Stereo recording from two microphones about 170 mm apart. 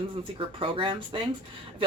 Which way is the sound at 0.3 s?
30° right (ahead or behind).